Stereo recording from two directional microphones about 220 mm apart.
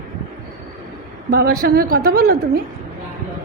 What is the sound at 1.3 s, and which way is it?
A man's voice, 45° right (ahead or behind).